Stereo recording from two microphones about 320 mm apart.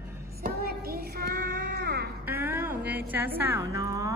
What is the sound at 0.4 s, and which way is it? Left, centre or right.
Child singing, right.